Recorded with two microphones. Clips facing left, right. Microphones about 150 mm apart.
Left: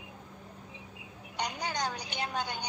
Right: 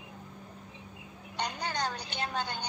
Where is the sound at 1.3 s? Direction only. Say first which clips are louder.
Even; 10° left (ahead or behind).